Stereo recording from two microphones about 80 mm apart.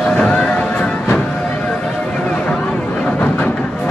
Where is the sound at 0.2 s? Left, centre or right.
Centre.